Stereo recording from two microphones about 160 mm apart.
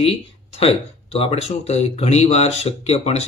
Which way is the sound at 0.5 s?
40° left (ahead or behind).